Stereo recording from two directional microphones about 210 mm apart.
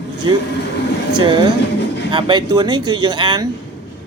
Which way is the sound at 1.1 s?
20° right (ahead or behind).